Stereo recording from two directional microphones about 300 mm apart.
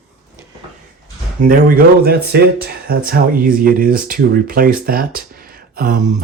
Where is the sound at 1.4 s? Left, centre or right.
Right.